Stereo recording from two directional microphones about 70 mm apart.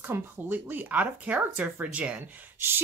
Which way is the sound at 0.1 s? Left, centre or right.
Right.